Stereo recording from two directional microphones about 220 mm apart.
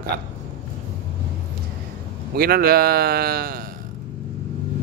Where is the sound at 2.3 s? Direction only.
45° right (ahead or behind).